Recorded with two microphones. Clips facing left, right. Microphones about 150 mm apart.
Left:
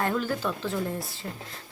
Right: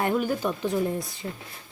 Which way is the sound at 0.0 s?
15° right (ahead or behind).